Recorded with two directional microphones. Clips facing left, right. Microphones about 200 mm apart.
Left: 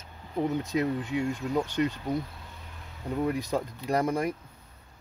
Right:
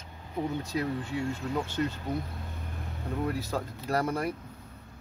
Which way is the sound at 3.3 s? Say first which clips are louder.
Left 3 dB; 15° left (ahead or behind).